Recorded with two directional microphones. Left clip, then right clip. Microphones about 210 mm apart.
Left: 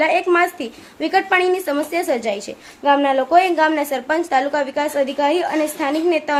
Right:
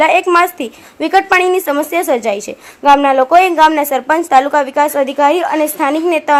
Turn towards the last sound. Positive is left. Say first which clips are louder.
# right 6 dB
turn(degrees=-30)  # may be behind; listen again after turning